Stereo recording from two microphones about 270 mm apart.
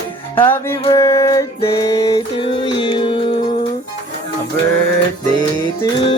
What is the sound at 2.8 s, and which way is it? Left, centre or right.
Music, centre.